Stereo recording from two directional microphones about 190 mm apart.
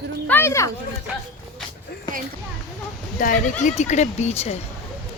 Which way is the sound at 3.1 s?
45° left (ahead or behind).